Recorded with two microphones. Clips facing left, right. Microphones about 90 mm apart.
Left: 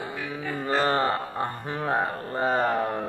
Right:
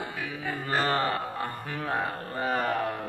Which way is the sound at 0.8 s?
30° left (ahead or behind).